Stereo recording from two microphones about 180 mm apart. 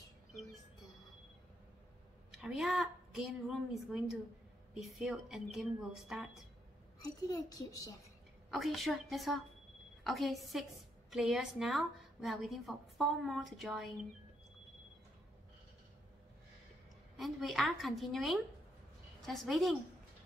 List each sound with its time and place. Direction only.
0.3 s a sound: centre (ahead or behind)
2.3 s a woman's voice: 5° right (ahead or behind)
7.0 s a child's voice: 20° left (ahead or behind)
8.5 s a woman's voice: centre (ahead or behind)
17.2 s a woman's voice: centre (ahead or behind)